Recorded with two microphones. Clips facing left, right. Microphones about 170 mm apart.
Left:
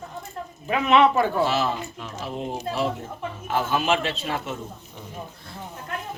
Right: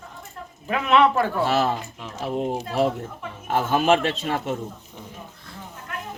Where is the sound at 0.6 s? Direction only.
Centre (ahead or behind).